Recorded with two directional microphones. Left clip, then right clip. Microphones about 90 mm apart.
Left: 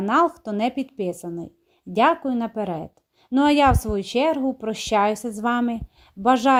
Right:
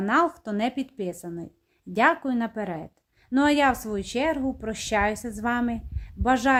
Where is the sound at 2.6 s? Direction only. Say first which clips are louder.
Left 5 dB; 20° left (ahead or behind).